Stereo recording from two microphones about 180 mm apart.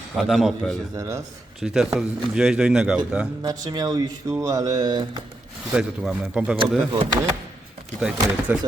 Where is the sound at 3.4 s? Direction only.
20° right (ahead or behind).